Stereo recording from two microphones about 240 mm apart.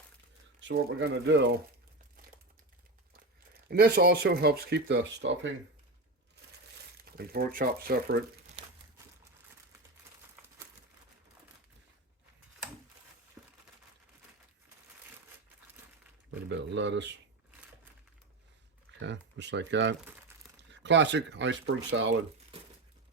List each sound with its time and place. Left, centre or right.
0.6 s speech: right
3.7 s speech: right
7.0 s speech: right
13.4 s a sound: centre
16.5 s speech: right
18.9 s speech: right
20.1 s crumpling: centre
20.7 s speech: right